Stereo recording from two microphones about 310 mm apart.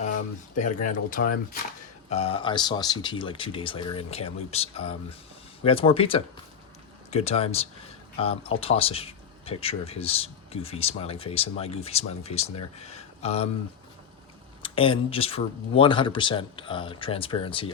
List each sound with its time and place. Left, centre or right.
0.6 s speech: left
14.6 s speech: centre